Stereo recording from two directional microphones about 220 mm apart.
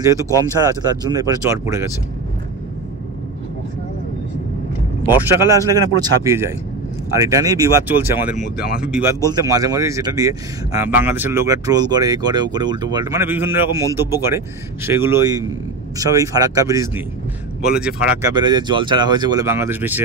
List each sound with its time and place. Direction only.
0.0 s speech: 15° right (ahead or behind)
5.0 s speech: 10° right (ahead or behind)
8.5 s speech: 40° left (ahead or behind)
8.9 s speech: 15° right (ahead or behind)
18.3 s speech: 20° right (ahead or behind)